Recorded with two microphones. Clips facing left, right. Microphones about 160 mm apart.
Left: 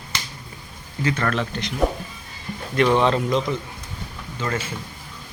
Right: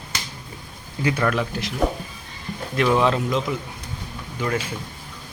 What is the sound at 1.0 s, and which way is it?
Speech, 10° right (ahead or behind).